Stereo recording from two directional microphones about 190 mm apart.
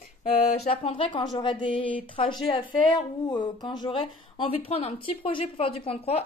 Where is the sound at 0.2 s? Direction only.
35° left (ahead or behind).